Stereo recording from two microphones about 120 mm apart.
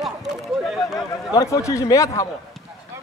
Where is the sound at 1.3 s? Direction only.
25° left (ahead or behind).